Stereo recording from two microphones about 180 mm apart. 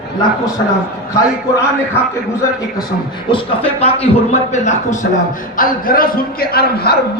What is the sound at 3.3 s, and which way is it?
A man's voice, 35° left (ahead or behind).